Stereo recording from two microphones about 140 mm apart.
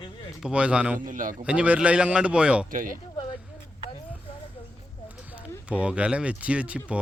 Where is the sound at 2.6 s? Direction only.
80° right.